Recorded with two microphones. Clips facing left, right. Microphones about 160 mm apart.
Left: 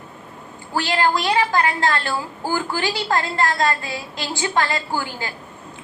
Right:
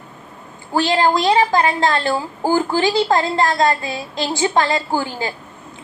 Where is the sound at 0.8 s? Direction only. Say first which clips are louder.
Right 4 dB; 20° right (ahead or behind).